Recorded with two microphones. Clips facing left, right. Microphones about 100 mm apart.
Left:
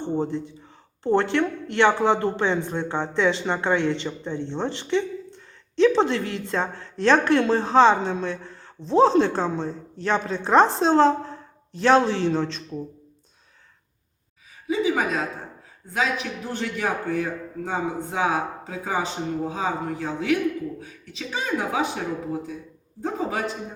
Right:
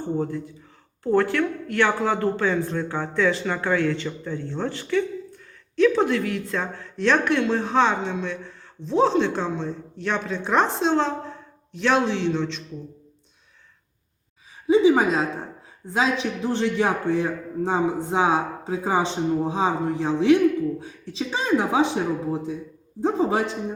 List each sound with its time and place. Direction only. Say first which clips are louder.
0.2 s speech: left 1 dB; 25° left (ahead or behind); by 12.6 s 40° left (ahead or behind)
14.7 s a man's voice: right 6 dB; 30° right (ahead or behind)
23.0 s a man's voice: right 6 dB; 25° right (ahead or behind)